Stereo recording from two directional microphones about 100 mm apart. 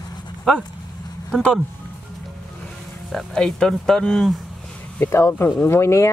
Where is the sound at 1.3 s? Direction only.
5° left (ahead or behind).